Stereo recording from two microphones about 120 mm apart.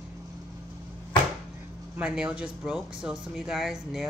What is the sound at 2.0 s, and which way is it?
Speech, 10° right (ahead or behind).